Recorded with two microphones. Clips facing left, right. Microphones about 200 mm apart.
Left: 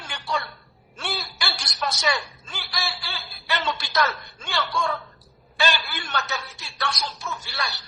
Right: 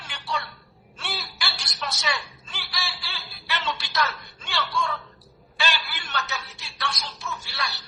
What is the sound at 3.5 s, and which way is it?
Music, 45° left (ahead or behind).